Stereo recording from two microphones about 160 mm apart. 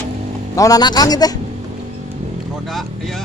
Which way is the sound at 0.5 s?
20° left (ahead or behind).